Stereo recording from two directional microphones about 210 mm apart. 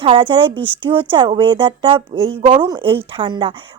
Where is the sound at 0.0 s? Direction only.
25° right (ahead or behind).